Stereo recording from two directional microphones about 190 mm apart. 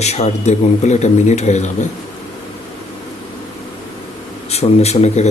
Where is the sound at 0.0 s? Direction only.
35° left (ahead or behind).